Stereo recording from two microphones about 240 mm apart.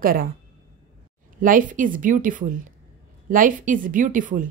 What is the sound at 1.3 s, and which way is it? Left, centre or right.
Speech, right.